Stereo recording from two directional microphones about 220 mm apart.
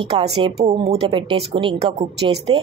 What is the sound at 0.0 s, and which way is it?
A woman's voice, 25° right (ahead or behind).